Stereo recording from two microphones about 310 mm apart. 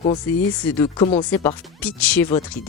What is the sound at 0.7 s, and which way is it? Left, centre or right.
Speech, centre.